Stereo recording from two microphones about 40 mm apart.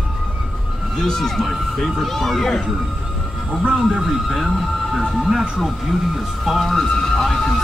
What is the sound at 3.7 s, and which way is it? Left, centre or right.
Speech, right.